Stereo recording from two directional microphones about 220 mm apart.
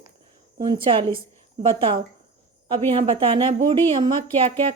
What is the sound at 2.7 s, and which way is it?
Speech, 25° right (ahead or behind).